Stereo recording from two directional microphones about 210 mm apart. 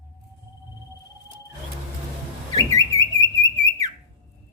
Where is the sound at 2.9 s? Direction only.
15° left (ahead or behind).